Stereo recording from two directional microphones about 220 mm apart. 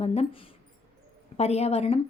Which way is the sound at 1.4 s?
30° left (ahead or behind).